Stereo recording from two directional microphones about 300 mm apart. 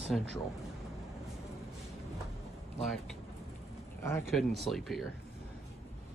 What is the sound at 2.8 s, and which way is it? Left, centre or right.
Speech, centre.